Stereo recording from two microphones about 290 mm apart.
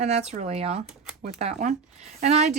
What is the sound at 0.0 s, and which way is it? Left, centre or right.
Speech, right.